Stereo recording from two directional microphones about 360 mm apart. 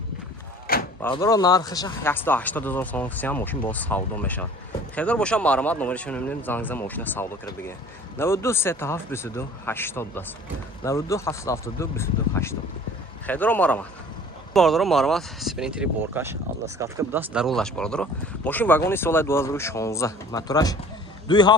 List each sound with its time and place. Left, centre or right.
0.7 s door: left
1.0 s a man's voice: centre